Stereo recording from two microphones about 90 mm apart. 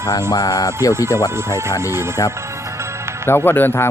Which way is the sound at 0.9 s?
30° right (ahead or behind).